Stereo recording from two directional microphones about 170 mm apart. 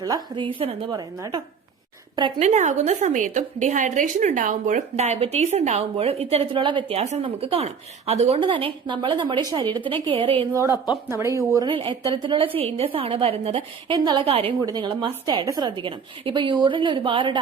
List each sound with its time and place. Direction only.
0.0 s a woman's voice: 25° right (ahead or behind)
2.4 s a woman's voice: 45° right (ahead or behind); by 10.3 s 30° right (ahead or behind)
10.5 s a woman's voice: 20° right (ahead or behind)
11.7 s a woman's voice: 30° right (ahead or behind)